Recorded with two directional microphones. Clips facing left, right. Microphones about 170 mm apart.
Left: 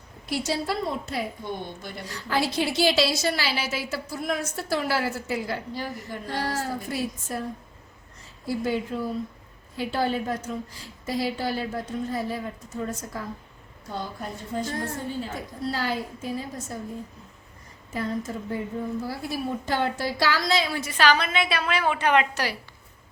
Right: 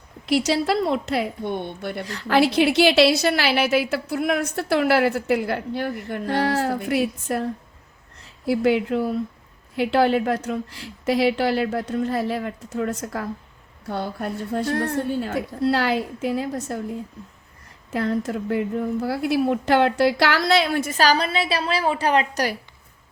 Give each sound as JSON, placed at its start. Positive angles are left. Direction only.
{"t": 0.3, "sound": "a woman's voice", "side_deg": -80}
{"t": 17.9, "sound": "a woman's voice", "side_deg": -70}